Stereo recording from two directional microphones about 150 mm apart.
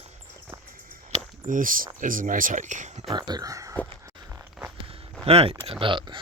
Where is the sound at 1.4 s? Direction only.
65° right (ahead or behind).